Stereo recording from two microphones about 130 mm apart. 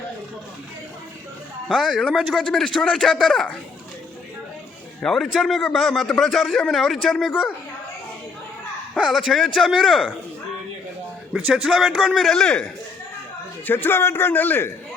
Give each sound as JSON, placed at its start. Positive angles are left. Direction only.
{"t": 1.6, "sound": "a man's voice", "side_deg": 0}
{"t": 5.0, "sound": "a man's voice", "side_deg": 0}
{"t": 9.0, "sound": "a man's voice", "side_deg": -5}
{"t": 11.3, "sound": "a man's voice", "side_deg": -5}
{"t": 13.7, "sound": "a man's voice", "side_deg": 15}